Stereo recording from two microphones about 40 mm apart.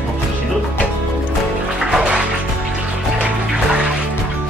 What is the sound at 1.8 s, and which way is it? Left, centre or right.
Music, centre.